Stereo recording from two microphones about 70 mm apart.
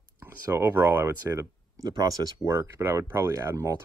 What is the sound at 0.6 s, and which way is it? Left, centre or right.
Speech, right.